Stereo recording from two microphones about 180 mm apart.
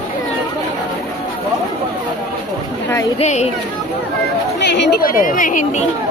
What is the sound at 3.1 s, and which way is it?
Speech, 40° left (ahead or behind).